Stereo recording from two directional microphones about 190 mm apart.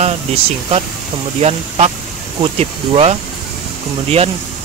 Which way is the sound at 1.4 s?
35° right (ahead or behind).